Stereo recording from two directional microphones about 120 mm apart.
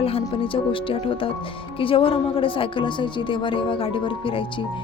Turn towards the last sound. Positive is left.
turn(degrees=45)  # may be behind; listen again after turning